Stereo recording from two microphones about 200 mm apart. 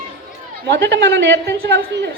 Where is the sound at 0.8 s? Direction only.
60° right (ahead or behind).